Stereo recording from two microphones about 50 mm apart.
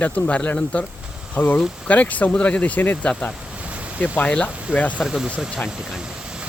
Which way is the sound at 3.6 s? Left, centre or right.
Right.